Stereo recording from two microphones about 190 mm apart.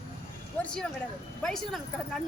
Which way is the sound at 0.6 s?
5° left (ahead or behind).